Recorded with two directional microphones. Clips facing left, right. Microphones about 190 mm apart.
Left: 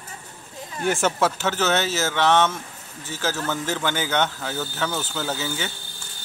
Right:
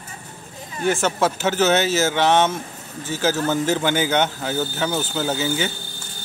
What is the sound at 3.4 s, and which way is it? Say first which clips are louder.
Speech: right 6 dB; 25° right (ahead or behind).